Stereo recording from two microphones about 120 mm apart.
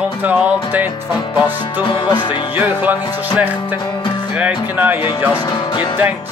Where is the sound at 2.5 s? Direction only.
15° right (ahead or behind).